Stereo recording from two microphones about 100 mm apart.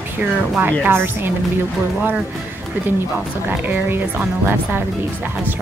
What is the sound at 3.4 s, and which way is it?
Speech, 20° right (ahead or behind).